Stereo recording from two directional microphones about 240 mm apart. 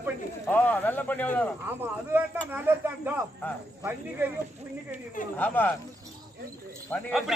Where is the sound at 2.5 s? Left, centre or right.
Centre.